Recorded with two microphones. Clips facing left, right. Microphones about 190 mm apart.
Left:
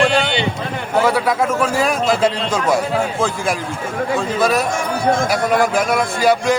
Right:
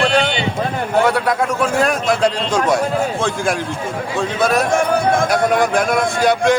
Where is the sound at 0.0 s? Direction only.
Centre (ahead or behind).